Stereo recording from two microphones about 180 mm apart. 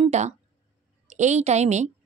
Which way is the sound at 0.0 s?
40° right (ahead or behind).